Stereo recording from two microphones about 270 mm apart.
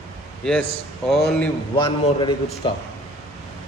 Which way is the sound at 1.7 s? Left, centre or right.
Centre.